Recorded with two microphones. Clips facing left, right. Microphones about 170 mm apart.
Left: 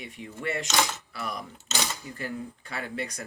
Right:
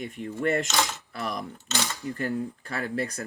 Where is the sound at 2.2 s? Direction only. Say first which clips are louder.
Right 6 dB; 40° right (ahead or behind).